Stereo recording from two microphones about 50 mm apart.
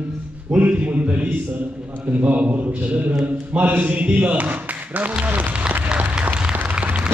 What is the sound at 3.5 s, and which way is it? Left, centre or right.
A man's voice, right.